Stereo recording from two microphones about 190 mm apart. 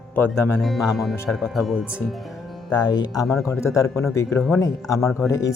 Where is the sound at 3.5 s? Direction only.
15° left (ahead or behind).